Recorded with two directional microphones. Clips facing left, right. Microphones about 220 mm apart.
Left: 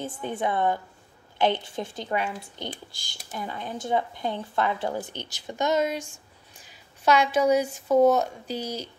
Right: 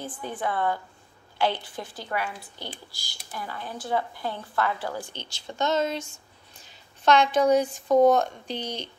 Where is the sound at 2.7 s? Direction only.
45° left (ahead or behind).